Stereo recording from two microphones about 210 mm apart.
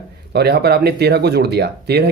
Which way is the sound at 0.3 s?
50° right (ahead or behind).